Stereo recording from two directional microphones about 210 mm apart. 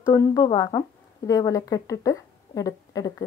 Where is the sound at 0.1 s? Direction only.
15° left (ahead or behind).